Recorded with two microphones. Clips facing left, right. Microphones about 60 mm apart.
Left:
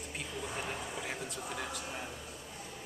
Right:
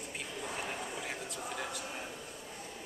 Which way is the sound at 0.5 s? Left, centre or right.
Centre.